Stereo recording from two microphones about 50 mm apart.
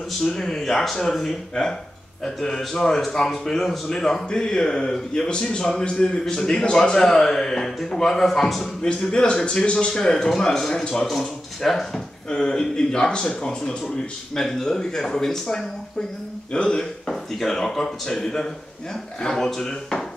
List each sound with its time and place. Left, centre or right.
0.2 s speech: centre
8.8 s speech: centre
11.1 s speech: centre